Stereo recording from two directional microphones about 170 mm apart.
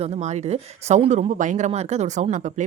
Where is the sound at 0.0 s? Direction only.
40° right (ahead or behind).